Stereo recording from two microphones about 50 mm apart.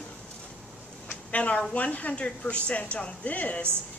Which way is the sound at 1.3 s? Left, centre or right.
Left.